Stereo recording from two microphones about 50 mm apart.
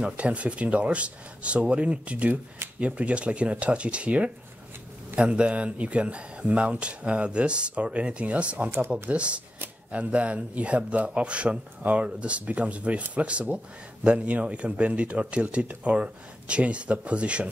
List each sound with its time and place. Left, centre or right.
0.0 s speech: right
8.6 s speech: right
9.1 s speech: right